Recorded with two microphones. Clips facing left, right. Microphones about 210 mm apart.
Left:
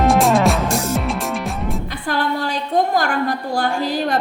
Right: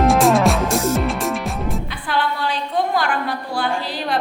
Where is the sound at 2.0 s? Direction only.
45° left (ahead or behind).